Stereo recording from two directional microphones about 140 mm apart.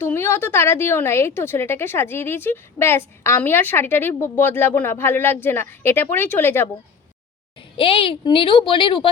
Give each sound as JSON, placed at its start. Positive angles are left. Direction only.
{"t": 0.0, "sound": "a woman's voice", "side_deg": 15}
{"t": 7.8, "sound": "speech", "side_deg": 40}